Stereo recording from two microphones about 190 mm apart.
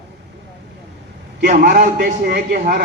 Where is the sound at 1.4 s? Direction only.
45° right (ahead or behind).